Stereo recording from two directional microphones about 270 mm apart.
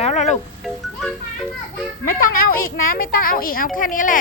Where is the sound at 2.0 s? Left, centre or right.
Left.